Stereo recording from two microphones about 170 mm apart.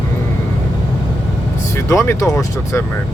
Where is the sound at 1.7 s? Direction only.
15° left (ahead or behind).